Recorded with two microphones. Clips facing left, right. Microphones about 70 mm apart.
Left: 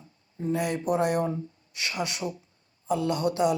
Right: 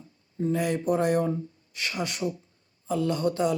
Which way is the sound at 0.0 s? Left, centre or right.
Centre.